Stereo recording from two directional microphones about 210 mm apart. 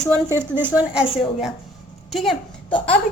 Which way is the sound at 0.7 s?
5° right (ahead or behind).